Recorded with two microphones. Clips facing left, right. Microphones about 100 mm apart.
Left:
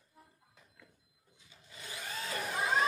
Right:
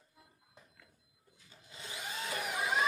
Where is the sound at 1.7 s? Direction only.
20° right (ahead or behind).